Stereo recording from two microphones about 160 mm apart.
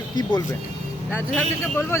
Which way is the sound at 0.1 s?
25° left (ahead or behind).